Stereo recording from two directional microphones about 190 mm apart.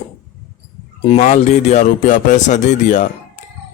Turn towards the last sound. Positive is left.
turn(degrees=40)  # may be behind; listen again after turning